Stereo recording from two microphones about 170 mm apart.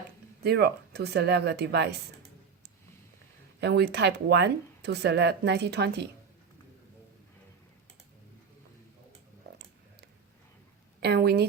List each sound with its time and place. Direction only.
0.4 s speech: 70° right (ahead or behind)
3.6 s speech: 80° right
11.0 s speech: 70° right (ahead or behind)